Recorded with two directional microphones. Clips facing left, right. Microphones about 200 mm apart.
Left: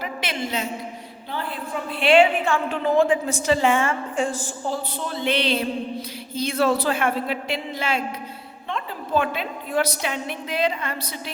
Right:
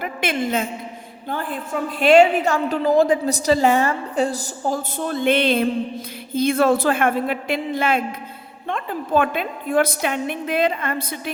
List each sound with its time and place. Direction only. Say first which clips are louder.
0.0 s a man's voice: right 5 dB; 50° right (ahead or behind)